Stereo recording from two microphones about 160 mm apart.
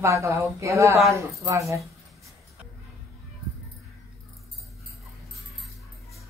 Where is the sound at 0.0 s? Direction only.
20° right (ahead or behind).